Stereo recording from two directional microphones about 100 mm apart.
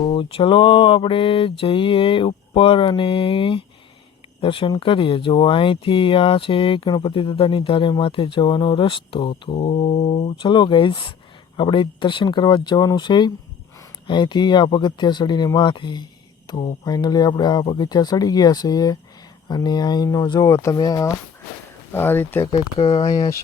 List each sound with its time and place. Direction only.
0.0 s speech: 60° left (ahead or behind); by 10.3 s 90° left
10.4 s speech: 50° left (ahead or behind)
16.5 s a sound: 45° left (ahead or behind)
16.8 s speech: 40° left (ahead or behind)
20.5 s speech: 30° left (ahead or behind)
21.9 s speech: 20° left (ahead or behind)
22.5 s speech: 70° left (ahead or behind)
23.0 s speech: 35° left (ahead or behind)